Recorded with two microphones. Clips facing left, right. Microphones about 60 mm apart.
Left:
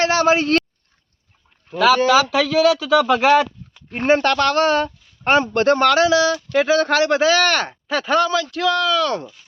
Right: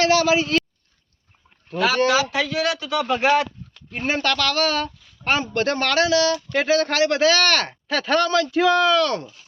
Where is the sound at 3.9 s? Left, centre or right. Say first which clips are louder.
Left 6 dB; left.